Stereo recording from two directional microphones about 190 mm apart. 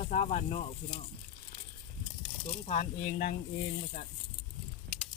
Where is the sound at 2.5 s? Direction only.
40° left (ahead or behind).